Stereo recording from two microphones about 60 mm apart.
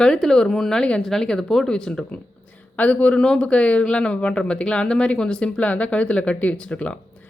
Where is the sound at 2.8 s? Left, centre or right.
Left.